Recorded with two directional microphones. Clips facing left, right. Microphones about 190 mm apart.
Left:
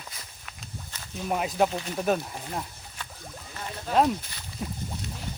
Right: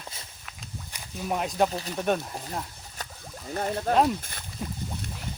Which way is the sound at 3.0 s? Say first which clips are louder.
Right 2 dB; 40° right (ahead or behind).